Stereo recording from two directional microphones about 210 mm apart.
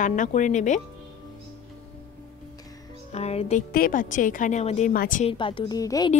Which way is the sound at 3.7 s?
40° left (ahead or behind).